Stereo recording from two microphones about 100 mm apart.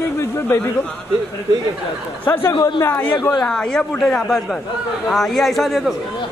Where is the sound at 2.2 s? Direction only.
20° left (ahead or behind).